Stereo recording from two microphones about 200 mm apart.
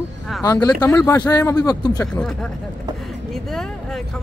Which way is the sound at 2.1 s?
5° left (ahead or behind).